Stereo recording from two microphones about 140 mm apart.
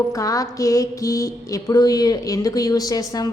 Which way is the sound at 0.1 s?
25° left (ahead or behind).